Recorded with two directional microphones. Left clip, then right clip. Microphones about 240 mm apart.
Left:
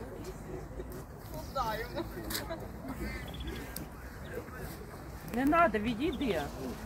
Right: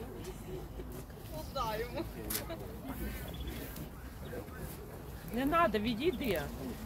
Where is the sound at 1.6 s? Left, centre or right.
Right.